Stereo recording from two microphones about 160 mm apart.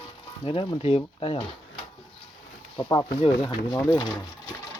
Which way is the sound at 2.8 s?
30° left (ahead or behind).